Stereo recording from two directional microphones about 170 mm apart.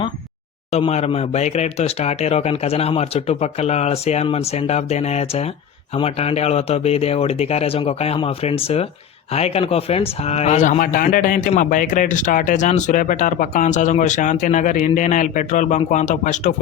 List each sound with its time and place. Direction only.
0.7 s speech: 40° left (ahead or behind)